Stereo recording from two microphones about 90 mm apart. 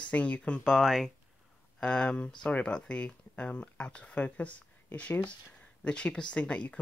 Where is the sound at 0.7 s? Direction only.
Centre (ahead or behind).